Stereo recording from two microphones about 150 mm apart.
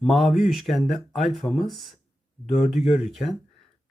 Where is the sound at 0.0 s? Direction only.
Centre (ahead or behind).